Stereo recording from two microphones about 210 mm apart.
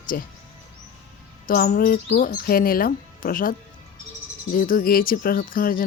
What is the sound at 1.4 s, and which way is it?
Speech, 40° left (ahead or behind).